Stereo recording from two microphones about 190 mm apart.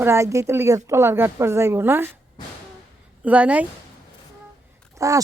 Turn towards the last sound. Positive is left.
turn(degrees=-15)  # may be behind; listen again after turning